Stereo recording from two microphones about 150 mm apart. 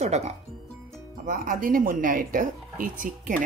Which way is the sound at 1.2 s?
70° right (ahead or behind).